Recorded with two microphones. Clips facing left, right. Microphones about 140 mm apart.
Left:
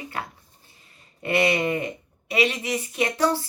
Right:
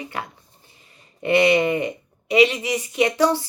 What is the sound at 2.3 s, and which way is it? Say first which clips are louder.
Speech: right 6 dB; 15° right (ahead or behind).